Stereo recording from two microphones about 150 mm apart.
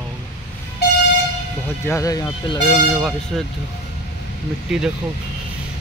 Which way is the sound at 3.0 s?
Centre (ahead or behind).